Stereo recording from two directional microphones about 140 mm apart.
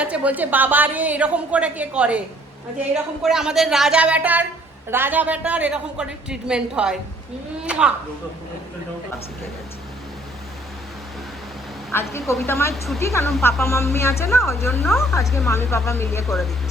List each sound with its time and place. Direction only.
0.0 s a woman's voice: 10° right (ahead or behind)
12.5 s a woman's voice: 20° left (ahead or behind)
16.2 s speech: centre (ahead or behind)